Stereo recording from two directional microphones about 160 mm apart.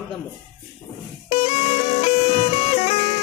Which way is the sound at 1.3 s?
40° left (ahead or behind).